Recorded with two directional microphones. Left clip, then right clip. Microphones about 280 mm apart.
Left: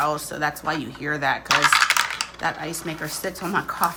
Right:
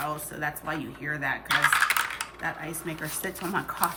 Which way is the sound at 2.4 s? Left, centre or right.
Centre.